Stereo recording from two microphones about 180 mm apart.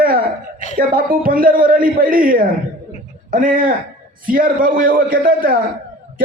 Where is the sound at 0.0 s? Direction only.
55° right (ahead or behind).